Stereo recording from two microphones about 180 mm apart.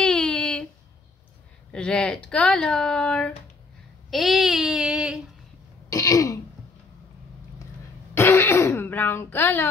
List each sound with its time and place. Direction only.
0.0 s a sound: 5° left (ahead or behind)
1.7 s speech: 5° left (ahead or behind)
4.1 s child singing: centre (ahead or behind)
5.9 s throat clearing: 20° left (ahead or behind)
8.1 s throat clearing: 15° left (ahead or behind)